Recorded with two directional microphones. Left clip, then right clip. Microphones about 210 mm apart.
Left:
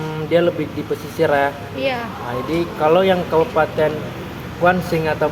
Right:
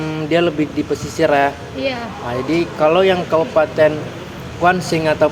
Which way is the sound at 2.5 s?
35° right (ahead or behind).